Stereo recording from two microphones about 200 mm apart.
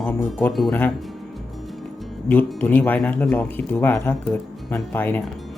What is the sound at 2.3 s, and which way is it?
Speech, 10° left (ahead or behind).